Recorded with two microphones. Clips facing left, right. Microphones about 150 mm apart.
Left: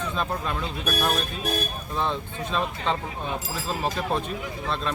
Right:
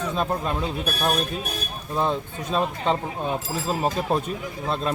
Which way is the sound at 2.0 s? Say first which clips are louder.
Right 3 dB; 40° right (ahead or behind).